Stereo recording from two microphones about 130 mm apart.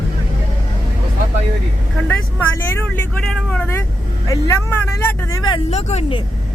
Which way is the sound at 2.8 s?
10° left (ahead or behind).